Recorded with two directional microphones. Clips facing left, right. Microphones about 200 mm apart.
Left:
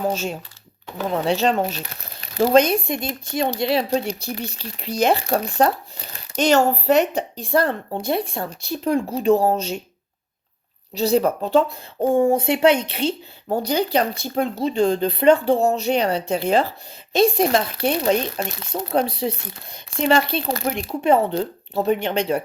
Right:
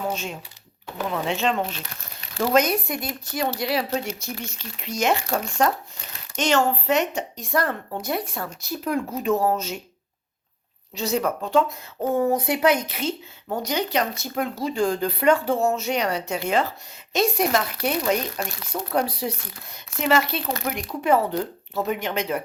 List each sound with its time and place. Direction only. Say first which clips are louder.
0.1 s speech: left 5 dB; 35° left (ahead or behind)
10.9 s speech: left 6 dB; 30° left (ahead or behind)